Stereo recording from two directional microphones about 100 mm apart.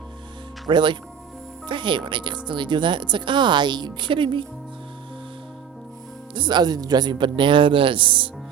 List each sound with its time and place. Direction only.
0.7 s speech: 50° right (ahead or behind)
6.3 s speech: 50° right (ahead or behind)